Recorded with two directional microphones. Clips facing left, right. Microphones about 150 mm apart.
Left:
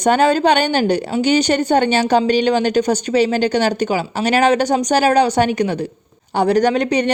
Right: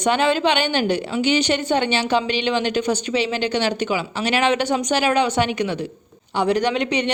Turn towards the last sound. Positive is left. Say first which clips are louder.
# left 5 dB
turn(degrees=40)  # may be behind; listen again after turning